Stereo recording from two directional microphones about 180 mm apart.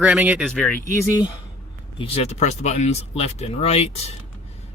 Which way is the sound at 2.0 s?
35° left (ahead or behind).